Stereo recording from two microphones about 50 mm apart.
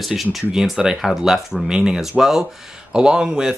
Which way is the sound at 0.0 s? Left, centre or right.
Centre.